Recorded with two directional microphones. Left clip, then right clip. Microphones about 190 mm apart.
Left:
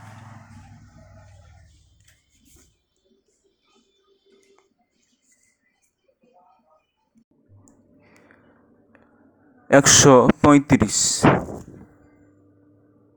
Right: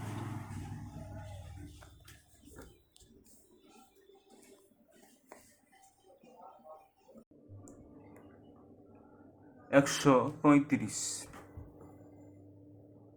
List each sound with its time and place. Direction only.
9.6 s speech: 50° left (ahead or behind)